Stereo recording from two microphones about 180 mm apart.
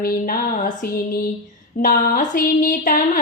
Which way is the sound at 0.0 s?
55° left (ahead or behind).